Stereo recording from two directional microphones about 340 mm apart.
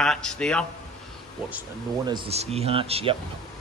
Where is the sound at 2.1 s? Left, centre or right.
Centre.